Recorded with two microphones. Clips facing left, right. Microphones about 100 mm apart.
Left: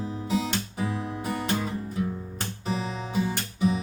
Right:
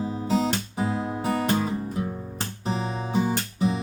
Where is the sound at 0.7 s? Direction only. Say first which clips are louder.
Right 4 dB; 40° right (ahead or behind).